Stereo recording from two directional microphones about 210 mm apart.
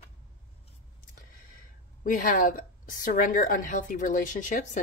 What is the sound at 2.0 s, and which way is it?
A woman's voice, 40° left (ahead or behind).